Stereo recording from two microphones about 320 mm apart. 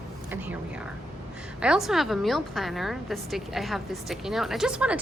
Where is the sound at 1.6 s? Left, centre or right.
Centre.